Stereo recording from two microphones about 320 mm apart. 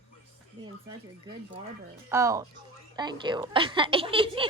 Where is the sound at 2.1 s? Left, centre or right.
Centre.